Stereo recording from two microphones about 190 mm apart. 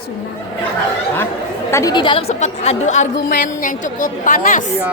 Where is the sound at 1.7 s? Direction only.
20° left (ahead or behind); by 4.6 s 45° left (ahead or behind).